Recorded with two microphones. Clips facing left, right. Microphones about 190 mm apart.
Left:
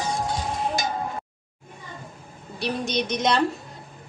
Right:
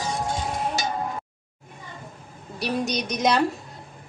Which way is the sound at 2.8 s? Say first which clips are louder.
Left 3 dB; 40° right (ahead or behind).